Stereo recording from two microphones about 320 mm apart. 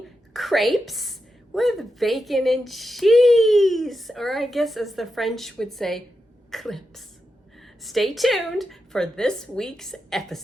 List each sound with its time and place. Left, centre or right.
0.3 s a woman's voice: centre